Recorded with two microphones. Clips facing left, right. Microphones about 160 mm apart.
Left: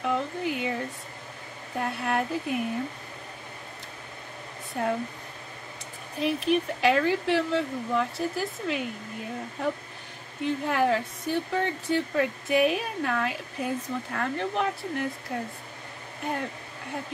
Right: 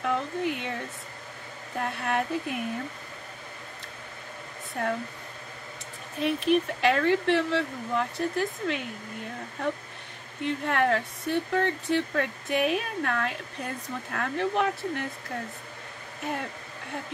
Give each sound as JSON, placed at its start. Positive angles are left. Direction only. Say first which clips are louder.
{"t": 0.0, "sound": "speech", "louder": "even", "side_deg": 0}
{"t": 4.7, "sound": "speech", "louder": "left 2 dB", "side_deg": 0}
{"t": 6.1, "sound": "speech", "louder": "right 1 dB", "side_deg": 0}
{"t": 10.4, "sound": "speech", "louder": "left 1 dB", "side_deg": 0}